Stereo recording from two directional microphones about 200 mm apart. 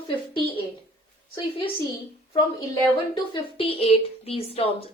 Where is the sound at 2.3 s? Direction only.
15° left (ahead or behind).